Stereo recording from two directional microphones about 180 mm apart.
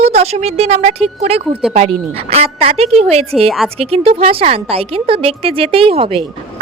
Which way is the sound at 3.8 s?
35° right (ahead or behind).